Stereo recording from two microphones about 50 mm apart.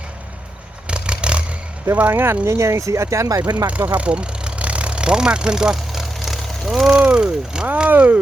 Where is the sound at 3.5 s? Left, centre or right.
Right; by 6.1 s centre.